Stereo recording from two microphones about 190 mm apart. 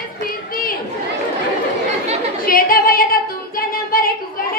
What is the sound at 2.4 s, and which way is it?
Female singing, 50° left (ahead or behind).